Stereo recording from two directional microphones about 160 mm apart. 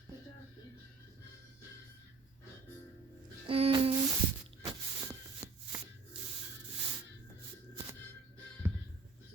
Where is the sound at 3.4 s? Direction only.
35° right (ahead or behind).